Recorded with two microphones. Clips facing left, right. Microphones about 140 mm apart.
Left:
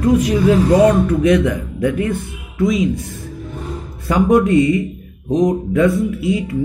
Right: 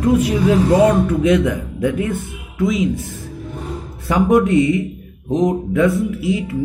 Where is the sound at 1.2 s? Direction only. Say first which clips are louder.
Left 1 dB; 20° right (ahead or behind).